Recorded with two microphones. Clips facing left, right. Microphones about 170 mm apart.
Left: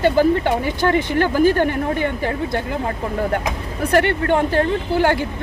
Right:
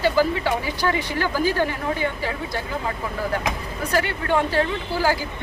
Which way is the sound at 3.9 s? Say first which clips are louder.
Left 5 dB; 60° left (ahead or behind).